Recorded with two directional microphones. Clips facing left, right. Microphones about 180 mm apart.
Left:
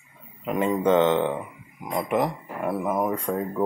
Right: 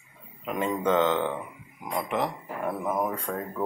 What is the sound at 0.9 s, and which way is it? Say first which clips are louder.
Speech: left 4 dB; 20° left (ahead or behind).